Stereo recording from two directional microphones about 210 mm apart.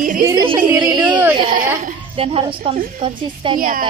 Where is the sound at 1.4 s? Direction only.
40° right (ahead or behind).